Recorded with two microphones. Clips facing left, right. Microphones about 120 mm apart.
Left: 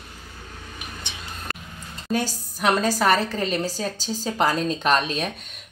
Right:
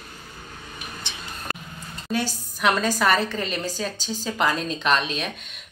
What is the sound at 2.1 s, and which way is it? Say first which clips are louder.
A woman's voice: left 1 dB; 45° left (ahead or behind).